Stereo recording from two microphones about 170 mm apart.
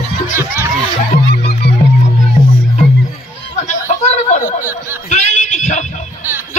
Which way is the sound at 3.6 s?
40° left (ahead or behind).